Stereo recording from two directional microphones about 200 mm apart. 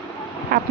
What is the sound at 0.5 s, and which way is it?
Duck, 45° right (ahead or behind).